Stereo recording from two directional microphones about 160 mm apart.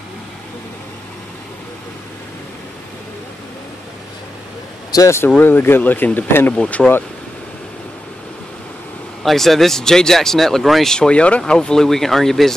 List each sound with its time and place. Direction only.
4.9 s speech: 15° left (ahead or behind)
9.2 s speech: centre (ahead or behind)